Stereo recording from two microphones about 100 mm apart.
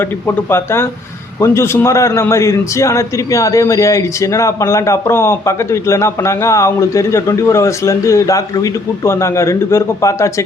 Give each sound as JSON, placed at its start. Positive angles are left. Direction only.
{"t": 0.3, "sound": "a man's voice", "side_deg": 25}